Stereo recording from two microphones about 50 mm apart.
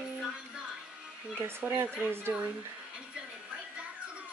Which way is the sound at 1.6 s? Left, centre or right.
Right.